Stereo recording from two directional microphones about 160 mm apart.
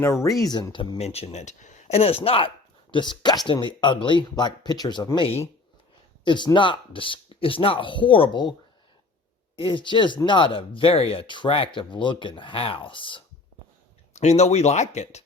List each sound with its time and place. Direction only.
0.0 s speech: 20° left (ahead or behind)
9.6 s speech: 30° left (ahead or behind)
14.1 s speech: 45° left (ahead or behind)